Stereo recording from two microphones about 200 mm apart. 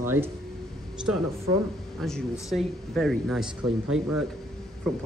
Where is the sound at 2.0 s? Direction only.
Centre (ahead or behind).